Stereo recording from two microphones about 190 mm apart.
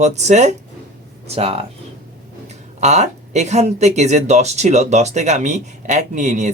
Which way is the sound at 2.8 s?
35° right (ahead or behind).